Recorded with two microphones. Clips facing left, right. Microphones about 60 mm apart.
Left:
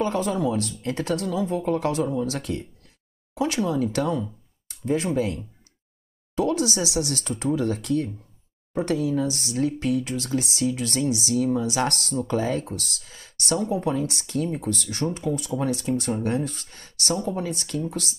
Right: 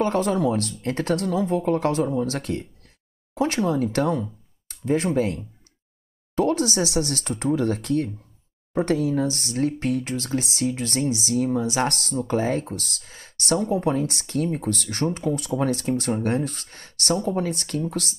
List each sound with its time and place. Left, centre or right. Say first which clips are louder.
0.0 s speech: right 2 dB; right